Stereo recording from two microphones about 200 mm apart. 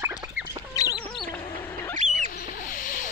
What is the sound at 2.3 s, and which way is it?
Rodents, 45° left (ahead or behind).